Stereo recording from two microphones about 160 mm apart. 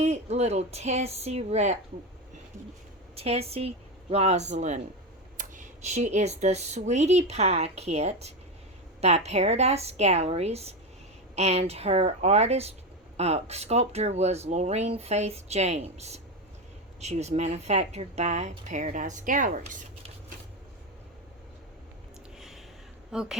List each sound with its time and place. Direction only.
0.0 s speech: 45° right (ahead or behind)
3.2 s a woman's voice: 40° right (ahead or behind)
22.4 s a sound: centre (ahead or behind)
23.1 s speech: 5° right (ahead or behind)